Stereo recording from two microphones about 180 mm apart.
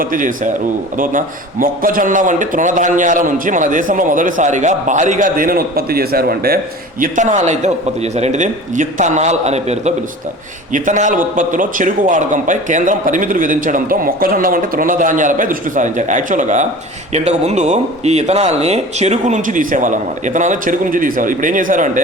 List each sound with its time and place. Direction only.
0.0 s a man's voice: 50° right (ahead or behind)
7.0 s a man's voice: 45° right (ahead or behind)